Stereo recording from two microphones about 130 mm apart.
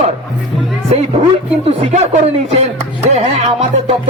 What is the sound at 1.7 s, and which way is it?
Speech, 55° right (ahead or behind).